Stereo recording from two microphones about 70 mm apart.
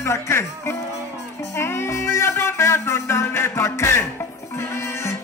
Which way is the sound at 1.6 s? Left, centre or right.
Left.